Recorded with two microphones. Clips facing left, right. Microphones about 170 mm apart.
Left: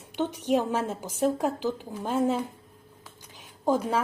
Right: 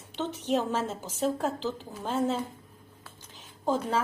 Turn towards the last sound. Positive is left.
turn(degrees=10)  # may be behind; listen again after turning